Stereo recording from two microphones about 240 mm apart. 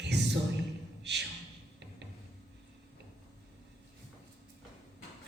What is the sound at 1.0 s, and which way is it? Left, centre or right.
Beatboxing, right.